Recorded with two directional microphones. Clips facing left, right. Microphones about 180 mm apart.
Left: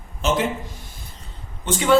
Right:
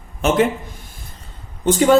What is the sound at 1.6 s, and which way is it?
Speech, 40° right (ahead or behind).